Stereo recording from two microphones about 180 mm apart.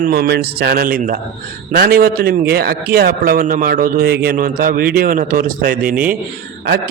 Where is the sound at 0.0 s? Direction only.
60° right (ahead or behind).